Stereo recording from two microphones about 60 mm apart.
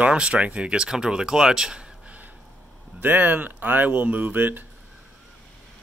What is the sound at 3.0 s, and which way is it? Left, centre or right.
Speech, right.